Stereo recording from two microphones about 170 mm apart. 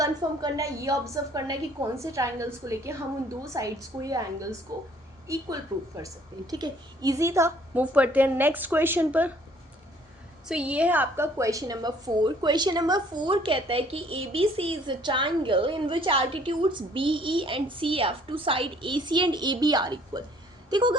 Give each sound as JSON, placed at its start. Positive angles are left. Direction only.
{"t": 0.0, "sound": "a woman's voice", "side_deg": -20}
{"t": 6.5, "sound": "a woman's voice", "side_deg": -20}
{"t": 10.5, "sound": "a woman's voice", "side_deg": -5}